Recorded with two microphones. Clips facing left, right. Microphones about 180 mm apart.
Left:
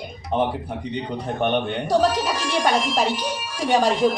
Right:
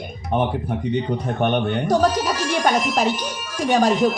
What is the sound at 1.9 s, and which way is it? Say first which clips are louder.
Speech: even; 45° right (ahead or behind).